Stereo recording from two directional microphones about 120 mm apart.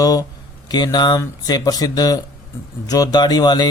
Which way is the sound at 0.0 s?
30° left (ahead or behind).